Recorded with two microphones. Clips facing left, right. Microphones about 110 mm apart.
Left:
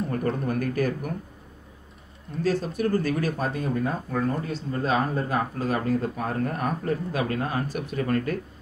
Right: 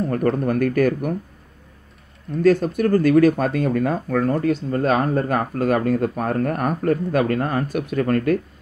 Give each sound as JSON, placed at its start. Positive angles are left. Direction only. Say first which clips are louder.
{"t": 0.5, "sound": "speech", "louder": "right 7 dB", "side_deg": -60}
{"t": 2.4, "sound": "speech", "louder": "right 8 dB", "side_deg": -55}
{"t": 4.6, "sound": "speech", "louder": "right 6 dB", "side_deg": -55}